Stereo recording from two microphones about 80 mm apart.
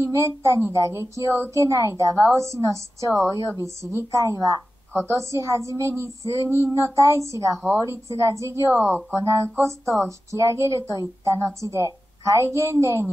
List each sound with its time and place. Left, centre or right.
0.0 s a woman's voice: right
8.7 s a woman's voice: right